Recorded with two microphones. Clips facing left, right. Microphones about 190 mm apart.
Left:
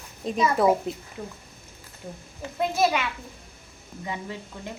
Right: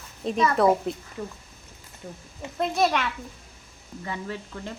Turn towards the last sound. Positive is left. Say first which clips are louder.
# right 2 dB
turn(degrees=15)  # may be behind; listen again after turning